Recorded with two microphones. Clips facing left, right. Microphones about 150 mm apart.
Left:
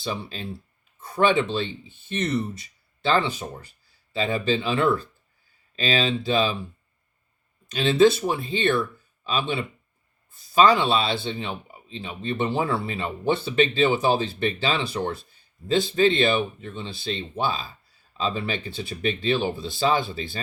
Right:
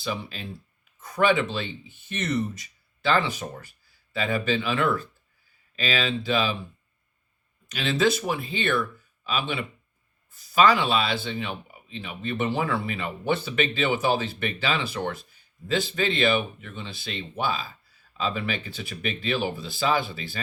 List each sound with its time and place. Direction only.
0.0 s speech: 30° left (ahead or behind)
4.1 s speech: 25° left (ahead or behind)
7.7 s speech: 30° left (ahead or behind)